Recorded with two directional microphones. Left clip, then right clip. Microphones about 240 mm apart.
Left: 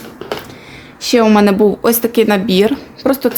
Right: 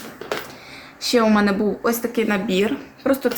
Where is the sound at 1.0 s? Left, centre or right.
Left.